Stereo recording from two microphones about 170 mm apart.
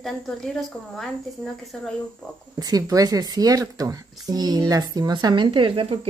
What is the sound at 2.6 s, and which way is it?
Speech, 20° right (ahead or behind).